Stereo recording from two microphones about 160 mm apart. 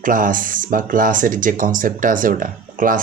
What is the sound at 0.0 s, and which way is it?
Speech, 55° right (ahead or behind).